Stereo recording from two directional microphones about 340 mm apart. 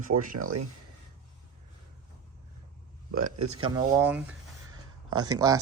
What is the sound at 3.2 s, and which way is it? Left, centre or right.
Speech, right.